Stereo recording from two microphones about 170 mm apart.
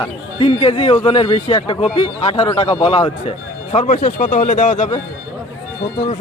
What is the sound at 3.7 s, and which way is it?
Speech, 45° left (ahead or behind).